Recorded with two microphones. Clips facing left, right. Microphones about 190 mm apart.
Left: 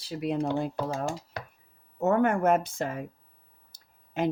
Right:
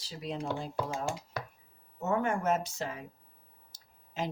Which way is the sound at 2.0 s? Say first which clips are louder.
Left 7 dB; 60° left (ahead or behind).